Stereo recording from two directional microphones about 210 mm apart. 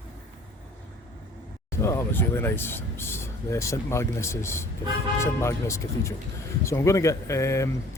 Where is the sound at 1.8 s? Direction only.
15° left (ahead or behind).